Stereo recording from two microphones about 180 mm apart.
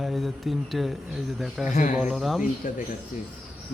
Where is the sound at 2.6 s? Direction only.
45° left (ahead or behind).